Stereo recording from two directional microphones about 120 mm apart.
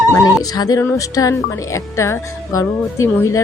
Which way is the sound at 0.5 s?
30° left (ahead or behind).